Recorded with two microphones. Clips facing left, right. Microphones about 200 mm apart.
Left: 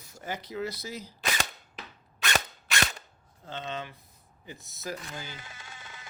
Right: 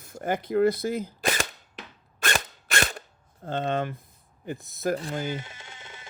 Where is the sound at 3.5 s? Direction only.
55° right (ahead or behind).